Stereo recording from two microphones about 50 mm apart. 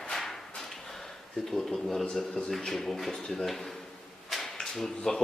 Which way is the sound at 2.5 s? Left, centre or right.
Centre.